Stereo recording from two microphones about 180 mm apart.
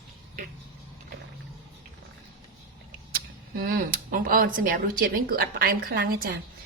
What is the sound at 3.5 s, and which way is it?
Speech, 55° right (ahead or behind).